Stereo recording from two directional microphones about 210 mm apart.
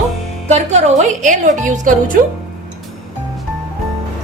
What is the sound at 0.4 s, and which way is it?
A woman's voice, 30° right (ahead or behind).